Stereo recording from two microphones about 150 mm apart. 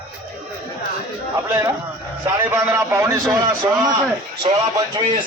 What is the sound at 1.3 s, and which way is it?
A man's voice, 20° right (ahead or behind).